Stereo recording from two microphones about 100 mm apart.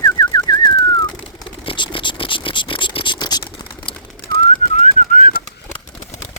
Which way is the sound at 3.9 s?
60° left (ahead or behind).